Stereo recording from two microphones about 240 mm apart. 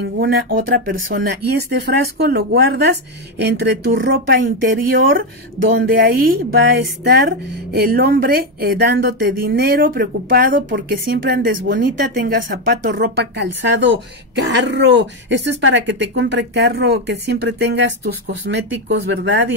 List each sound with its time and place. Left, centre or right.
0.2 s speech: right
5.7 s speech: right